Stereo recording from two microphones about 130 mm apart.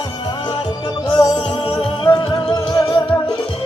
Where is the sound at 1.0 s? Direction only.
35° left (ahead or behind).